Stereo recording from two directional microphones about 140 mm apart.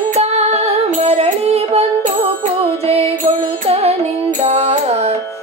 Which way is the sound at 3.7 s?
50° right (ahead or behind).